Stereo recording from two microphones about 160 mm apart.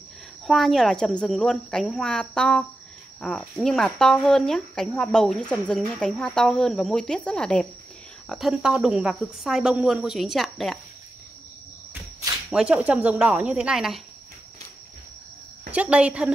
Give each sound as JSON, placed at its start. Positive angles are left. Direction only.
{"t": 0.5, "sound": "speech", "side_deg": 0}
{"t": 11.9, "sound": "cricket", "side_deg": -20}
{"t": 12.4, "sound": "speech", "side_deg": -5}
{"t": 15.7, "sound": "speech", "side_deg": -10}